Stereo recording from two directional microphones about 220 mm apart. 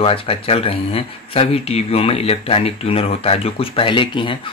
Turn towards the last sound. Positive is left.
turn(degrees=20)  # may be behind; listen again after turning